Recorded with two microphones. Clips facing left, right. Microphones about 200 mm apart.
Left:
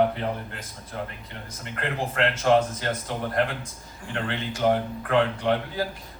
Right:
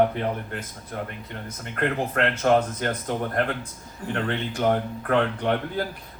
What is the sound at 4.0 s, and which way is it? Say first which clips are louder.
A man's voice: right 3 dB; 45° right (ahead or behind).